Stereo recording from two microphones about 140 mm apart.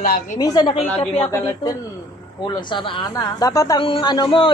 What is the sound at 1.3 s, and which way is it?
Speech, 20° left (ahead or behind).